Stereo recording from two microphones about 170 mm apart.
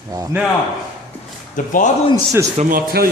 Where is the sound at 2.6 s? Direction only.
55° right (ahead or behind).